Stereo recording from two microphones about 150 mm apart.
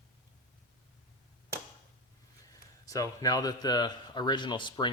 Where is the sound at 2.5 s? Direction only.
25° left (ahead or behind).